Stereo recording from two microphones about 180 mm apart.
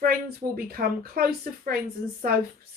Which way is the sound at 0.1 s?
55° right (ahead or behind).